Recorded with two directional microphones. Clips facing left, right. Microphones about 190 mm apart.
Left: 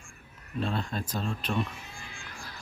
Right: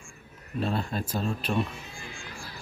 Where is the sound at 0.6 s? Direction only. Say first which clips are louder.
Right 2 dB; 5° right (ahead or behind).